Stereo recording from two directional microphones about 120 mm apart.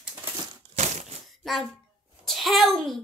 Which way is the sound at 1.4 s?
Centre (ahead or behind).